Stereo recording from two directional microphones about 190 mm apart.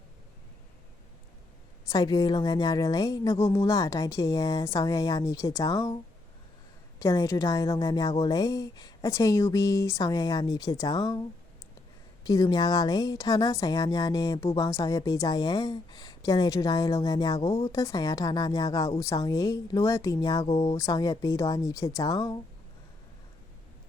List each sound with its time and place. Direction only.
1.9 s speech: 20° left (ahead or behind)
7.0 s a woman's voice: 15° left (ahead or behind)
12.2 s speech: 20° left (ahead or behind)